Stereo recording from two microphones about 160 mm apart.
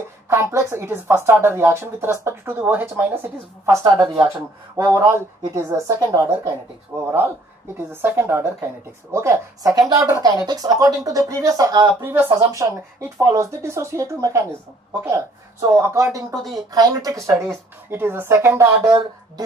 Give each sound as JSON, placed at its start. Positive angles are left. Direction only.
{"t": 0.3, "sound": "speech", "side_deg": -15}